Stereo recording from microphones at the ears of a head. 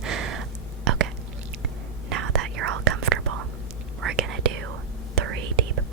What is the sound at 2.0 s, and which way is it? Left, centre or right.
Whispering, right.